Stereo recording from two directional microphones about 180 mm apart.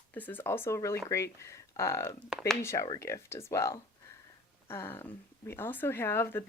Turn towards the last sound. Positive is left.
turn(degrees=10)  # may be behind; listen again after turning